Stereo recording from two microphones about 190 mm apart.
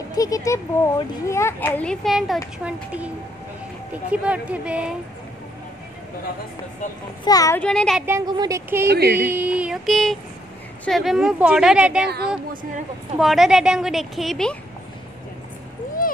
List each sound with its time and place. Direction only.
0.1 s a child's voice: 20° left (ahead or behind); by 3.1 s 5° right (ahead or behind)
4.1 s speech: 5° right (ahead or behind)
7.2 s a child's voice: 15° left (ahead or behind)
7.6 s a woman's voice: 5° left (ahead or behind)
8.0 s speech: 15° right (ahead or behind)
8.8 s a sound: 55° right (ahead or behind)
9.3 s a woman's voice: 5° right (ahead or behind)
13.2 s a woman's voice: centre (ahead or behind)